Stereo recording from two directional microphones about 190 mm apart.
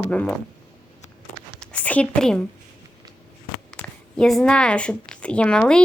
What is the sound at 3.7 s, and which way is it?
A woman's voice, 5° left (ahead or behind).